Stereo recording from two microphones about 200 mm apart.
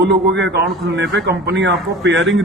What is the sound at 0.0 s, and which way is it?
A man's voice, 60° right (ahead or behind).